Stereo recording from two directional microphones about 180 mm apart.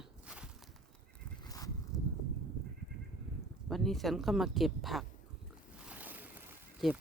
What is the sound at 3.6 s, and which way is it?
Speech, centre (ahead or behind).